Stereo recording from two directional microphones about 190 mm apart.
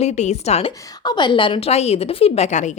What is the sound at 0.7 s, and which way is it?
A woman's voice, 20° left (ahead or behind).